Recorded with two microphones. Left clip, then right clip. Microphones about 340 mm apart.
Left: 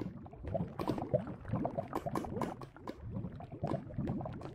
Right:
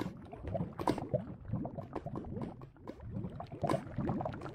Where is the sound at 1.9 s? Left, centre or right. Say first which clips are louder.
Left 5 dB; left.